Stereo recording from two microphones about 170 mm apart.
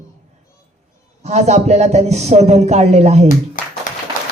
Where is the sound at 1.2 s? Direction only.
40° right (ahead or behind).